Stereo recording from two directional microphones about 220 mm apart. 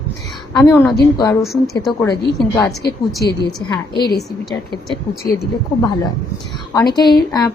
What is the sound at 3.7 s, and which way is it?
Speech, 20° left (ahead or behind).